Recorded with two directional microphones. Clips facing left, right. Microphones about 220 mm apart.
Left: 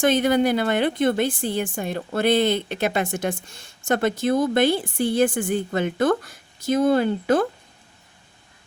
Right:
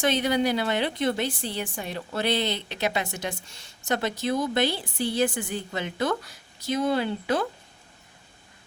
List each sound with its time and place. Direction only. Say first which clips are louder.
0.0 s a woman's voice: left 5 dB; 50° left (ahead or behind)